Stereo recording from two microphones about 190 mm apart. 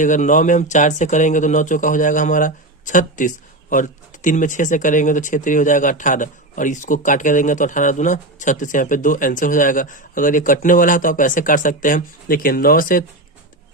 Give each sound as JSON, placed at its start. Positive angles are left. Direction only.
{"t": 0.0, "sound": "speech", "side_deg": 40}